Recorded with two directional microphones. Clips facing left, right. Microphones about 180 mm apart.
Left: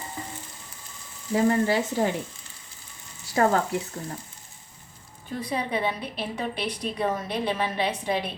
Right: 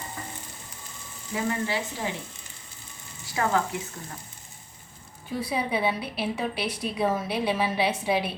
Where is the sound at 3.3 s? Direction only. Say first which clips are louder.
Left 5 dB; 40° left (ahead or behind).